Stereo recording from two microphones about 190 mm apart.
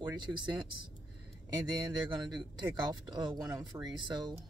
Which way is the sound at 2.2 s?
20° right (ahead or behind).